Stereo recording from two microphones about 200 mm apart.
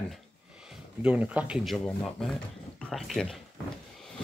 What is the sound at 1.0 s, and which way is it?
Speech, 5° right (ahead or behind).